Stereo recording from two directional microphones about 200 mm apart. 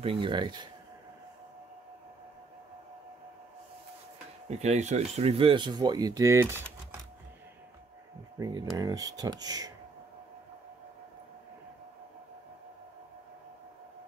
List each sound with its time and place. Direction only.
0.0 s speech: 25° right (ahead or behind)
4.5 s speech: 35° right (ahead or behind); by 6.6 s 15° right (ahead or behind)
8.4 s speech: 20° right (ahead or behind)